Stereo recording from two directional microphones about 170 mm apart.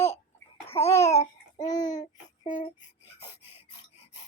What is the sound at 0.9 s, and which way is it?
Speech, 20° left (ahead or behind).